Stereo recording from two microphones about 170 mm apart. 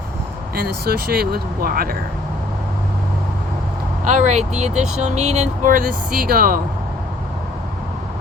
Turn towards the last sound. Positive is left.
turn(degrees=-60)  # may be behind; listen again after turning